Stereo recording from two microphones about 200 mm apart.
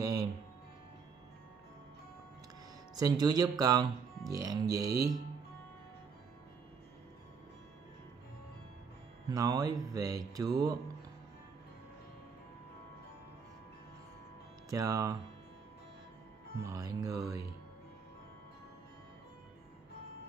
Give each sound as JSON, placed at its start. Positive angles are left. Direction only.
{"t": 0.0, "sound": "music", "side_deg": -15}
{"t": 3.0, "sound": "speech", "side_deg": -20}
{"t": 9.3, "sound": "speech", "side_deg": -15}
{"t": 14.7, "sound": "speech", "side_deg": -15}
{"t": 16.5, "sound": "speech", "side_deg": -15}